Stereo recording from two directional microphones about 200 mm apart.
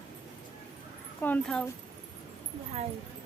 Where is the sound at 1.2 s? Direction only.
10° left (ahead or behind).